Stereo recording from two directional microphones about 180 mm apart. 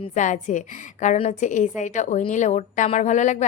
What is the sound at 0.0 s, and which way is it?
A woman's voice, 40° left (ahead or behind).